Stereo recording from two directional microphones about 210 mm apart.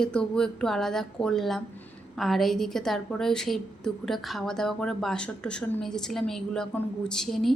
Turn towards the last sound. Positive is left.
turn(degrees=0)  # may be behind; listen again after turning